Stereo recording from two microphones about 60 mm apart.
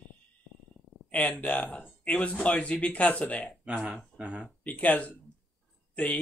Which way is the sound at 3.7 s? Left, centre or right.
Right.